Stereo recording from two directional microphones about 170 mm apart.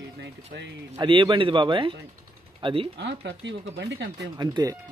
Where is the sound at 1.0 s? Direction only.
30° right (ahead or behind).